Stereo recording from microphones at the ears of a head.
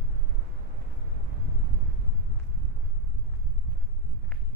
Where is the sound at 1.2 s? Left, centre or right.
Right.